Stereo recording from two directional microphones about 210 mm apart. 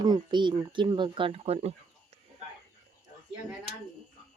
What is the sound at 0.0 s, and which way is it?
Speech, 20° right (ahead or behind).